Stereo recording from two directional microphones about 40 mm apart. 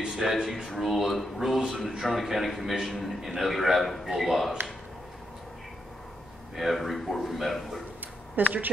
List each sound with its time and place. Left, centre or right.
0.0 s a man's voice: centre
6.5 s a man's voice: centre
8.4 s speech: right